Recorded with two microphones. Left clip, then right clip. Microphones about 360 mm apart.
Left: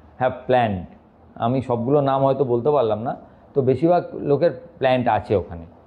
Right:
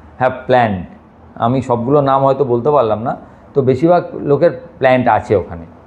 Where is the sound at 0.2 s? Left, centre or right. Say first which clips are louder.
Right 7 dB; centre.